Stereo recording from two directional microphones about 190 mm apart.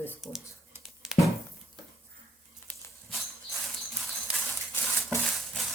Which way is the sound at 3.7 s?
Centre (ahead or behind).